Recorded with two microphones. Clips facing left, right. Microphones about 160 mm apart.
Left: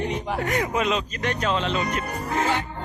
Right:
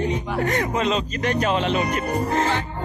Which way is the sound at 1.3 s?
60° right (ahead or behind).